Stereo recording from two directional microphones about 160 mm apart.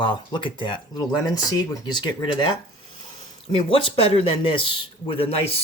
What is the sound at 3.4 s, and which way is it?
Speech, 35° left (ahead or behind).